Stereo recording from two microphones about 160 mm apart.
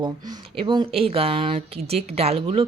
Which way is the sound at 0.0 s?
30° right (ahead or behind).